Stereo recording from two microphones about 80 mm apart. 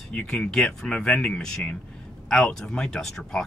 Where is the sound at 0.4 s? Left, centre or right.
Centre.